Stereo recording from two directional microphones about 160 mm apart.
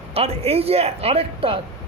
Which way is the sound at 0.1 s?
40° right (ahead or behind).